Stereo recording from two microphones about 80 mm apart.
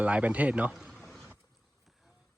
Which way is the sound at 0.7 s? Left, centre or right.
Centre.